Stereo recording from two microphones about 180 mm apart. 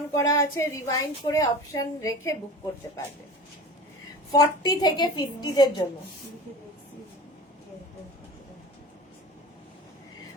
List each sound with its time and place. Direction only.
0.1 s a woman's voice: 20° left (ahead or behind)
4.3 s a woman's voice: 20° left (ahead or behind)